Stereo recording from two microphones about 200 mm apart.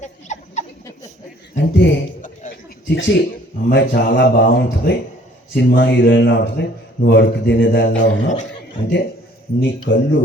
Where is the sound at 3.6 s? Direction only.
55° left (ahead or behind).